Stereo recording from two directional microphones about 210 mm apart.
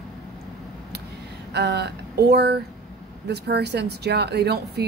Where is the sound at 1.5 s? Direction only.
50° right (ahead or behind).